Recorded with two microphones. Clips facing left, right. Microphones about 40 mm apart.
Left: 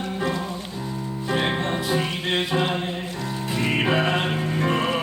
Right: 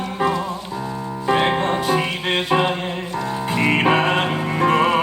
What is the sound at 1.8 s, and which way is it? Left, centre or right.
Music, right.